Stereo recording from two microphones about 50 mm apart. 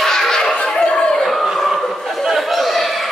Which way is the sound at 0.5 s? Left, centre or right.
Centre.